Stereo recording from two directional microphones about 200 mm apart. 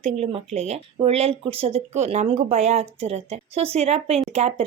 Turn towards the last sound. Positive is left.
turn(degrees=-30)  # may be behind; listen again after turning